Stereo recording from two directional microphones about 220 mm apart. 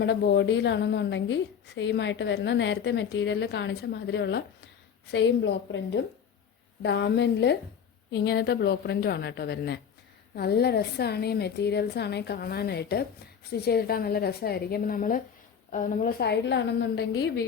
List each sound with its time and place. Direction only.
0.0 s a woman's voice: 50° left (ahead or behind)